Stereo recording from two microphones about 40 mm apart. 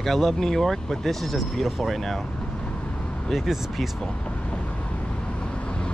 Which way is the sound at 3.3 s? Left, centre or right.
Centre.